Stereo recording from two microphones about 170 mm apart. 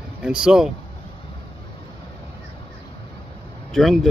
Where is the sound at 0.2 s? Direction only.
5° right (ahead or behind).